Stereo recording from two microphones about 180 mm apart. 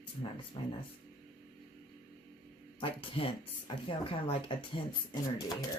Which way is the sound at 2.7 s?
30° left (ahead or behind).